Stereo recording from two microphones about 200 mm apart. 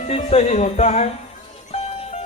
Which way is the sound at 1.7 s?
30° left (ahead or behind).